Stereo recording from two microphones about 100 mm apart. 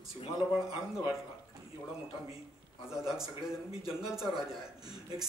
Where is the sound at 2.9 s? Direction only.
5° right (ahead or behind).